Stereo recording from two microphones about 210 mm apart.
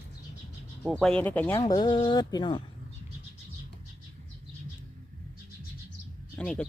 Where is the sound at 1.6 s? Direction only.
20° left (ahead or behind).